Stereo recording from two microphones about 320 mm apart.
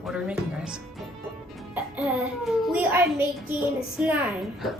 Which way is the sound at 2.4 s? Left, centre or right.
Centre.